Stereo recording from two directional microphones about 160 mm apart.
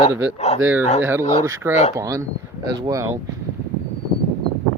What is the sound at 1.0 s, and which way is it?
Speech, 15° right (ahead or behind).